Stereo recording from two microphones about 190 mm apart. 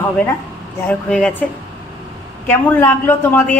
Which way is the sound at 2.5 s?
10° left (ahead or behind).